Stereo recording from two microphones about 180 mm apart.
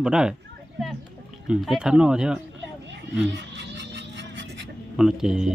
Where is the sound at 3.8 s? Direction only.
70° right (ahead or behind).